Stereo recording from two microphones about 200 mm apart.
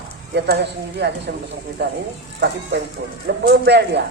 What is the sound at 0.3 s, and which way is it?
A man's voice, 55° right (ahead or behind).